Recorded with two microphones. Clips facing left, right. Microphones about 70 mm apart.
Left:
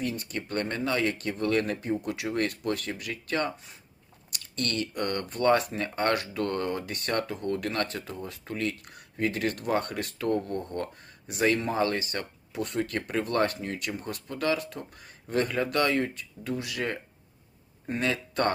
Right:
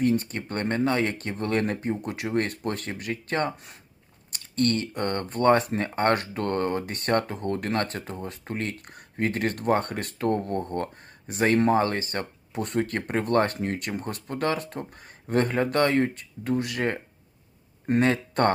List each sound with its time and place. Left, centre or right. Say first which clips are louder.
0.0 s speech: right 8 dB; right
18.0 s speech: right 3 dB; right